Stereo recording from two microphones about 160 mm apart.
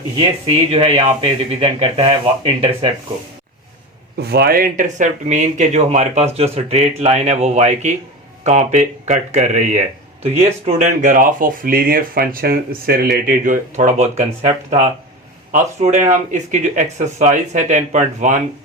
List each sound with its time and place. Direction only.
0.4 s speech: 35° right (ahead or behind)
4.2 s speech: 85° right; by 10.9 s 40° right (ahead or behind)
11.0 s speech: 60° right (ahead or behind)
13.2 s speech: 55° right (ahead or behind)